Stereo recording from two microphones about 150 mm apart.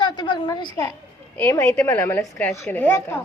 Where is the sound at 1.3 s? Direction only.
15° left (ahead or behind).